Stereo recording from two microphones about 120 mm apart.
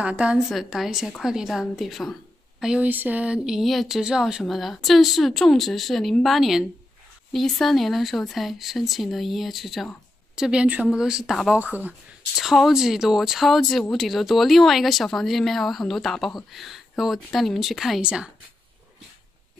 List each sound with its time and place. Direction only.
0.0 s speech: 10° right (ahead or behind)
2.6 s speech: 10° right (ahead or behind)
11.5 s speech: 15° right (ahead or behind)
12.4 s speech: centre (ahead or behind)